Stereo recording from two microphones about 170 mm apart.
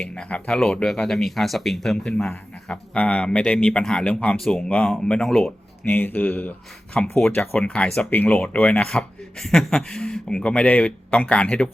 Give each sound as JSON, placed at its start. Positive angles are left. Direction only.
{"t": 0.0, "sound": "speech", "side_deg": 5}